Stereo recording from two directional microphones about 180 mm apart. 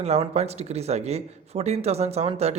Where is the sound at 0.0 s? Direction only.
35° right (ahead or behind).